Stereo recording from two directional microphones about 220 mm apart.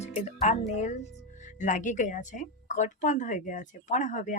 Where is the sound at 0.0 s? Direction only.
30° left (ahead or behind).